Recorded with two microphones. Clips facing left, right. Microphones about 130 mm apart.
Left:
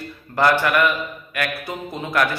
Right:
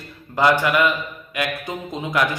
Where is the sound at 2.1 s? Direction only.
15° right (ahead or behind).